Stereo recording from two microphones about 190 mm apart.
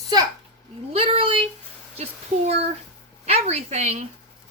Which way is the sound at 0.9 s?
30° right (ahead or behind).